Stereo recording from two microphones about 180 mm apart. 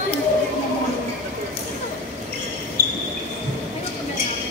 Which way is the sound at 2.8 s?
55° left (ahead or behind).